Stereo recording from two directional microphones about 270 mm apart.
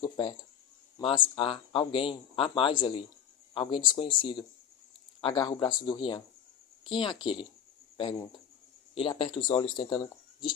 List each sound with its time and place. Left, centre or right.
0.0 s speech: centre
9.0 s speech: centre